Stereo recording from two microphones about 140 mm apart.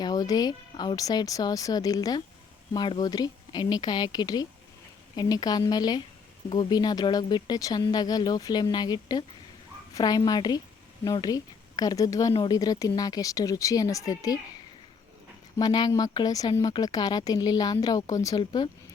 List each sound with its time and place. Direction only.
0.0 s a woman's voice: 25° left (ahead or behind)
15.5 s speech: 30° left (ahead or behind)